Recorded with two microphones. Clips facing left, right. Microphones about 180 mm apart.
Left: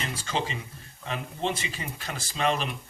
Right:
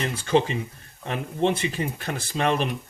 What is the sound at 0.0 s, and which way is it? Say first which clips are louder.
Speech: right 9 dB; 60° right (ahead or behind).